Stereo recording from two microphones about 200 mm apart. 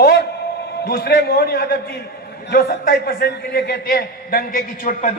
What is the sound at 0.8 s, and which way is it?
A man's voice, 50° left (ahead or behind).